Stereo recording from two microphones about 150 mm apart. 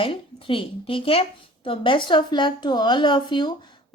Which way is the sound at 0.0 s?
35° left (ahead or behind).